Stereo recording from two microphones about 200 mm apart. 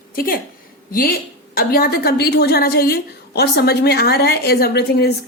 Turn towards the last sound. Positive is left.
turn(degrees=55)  # may be behind; listen again after turning